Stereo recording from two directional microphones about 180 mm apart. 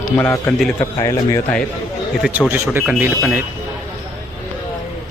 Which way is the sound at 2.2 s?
10° right (ahead or behind).